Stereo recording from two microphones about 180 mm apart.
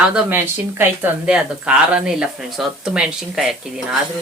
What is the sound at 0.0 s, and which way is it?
Speech, 5° right (ahead or behind).